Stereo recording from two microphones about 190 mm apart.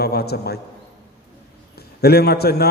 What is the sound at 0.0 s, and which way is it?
Speech, 55° left (ahead or behind).